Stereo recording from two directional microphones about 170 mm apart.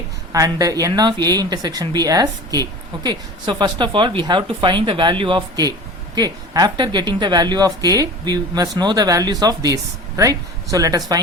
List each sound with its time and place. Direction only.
0.3 s speech: 20° right (ahead or behind)